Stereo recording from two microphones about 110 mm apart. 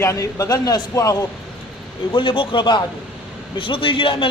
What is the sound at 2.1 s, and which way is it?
A man's voice, 50° left (ahead or behind).